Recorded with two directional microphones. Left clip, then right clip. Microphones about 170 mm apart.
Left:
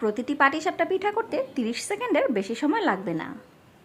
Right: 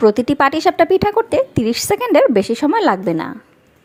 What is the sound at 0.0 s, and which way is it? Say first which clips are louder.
A woman's voice: right 10 dB; 35° right (ahead or behind).